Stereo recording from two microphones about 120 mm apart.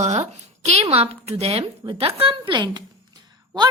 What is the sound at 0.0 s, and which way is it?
A woman's voice, 65° right (ahead or behind).